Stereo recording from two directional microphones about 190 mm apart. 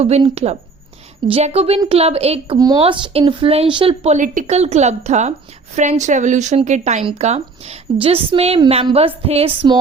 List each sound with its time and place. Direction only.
0.0 s speech: 35° right (ahead or behind)
2.6 s speech: 20° right (ahead or behind)